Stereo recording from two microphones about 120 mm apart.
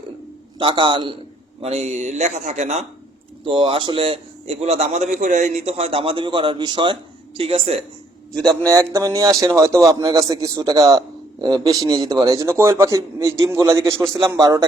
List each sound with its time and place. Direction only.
0.6 s a man's voice: 40° right (ahead or behind)
1.6 s speech: 60° right (ahead or behind)
3.4 s a man's voice: 50° right (ahead or behind)
7.3 s speech: 55° right (ahead or behind)
8.9 s a man's voice: 25° right (ahead or behind)